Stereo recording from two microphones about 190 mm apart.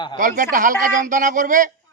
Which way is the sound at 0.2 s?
45° right (ahead or behind).